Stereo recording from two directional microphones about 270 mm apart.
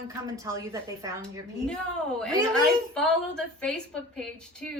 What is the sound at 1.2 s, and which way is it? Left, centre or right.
A woman's voice, centre.